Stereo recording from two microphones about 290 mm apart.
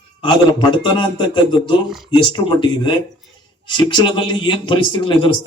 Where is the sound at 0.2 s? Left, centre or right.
Centre.